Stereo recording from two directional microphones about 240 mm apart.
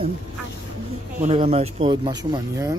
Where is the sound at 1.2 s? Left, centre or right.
Right.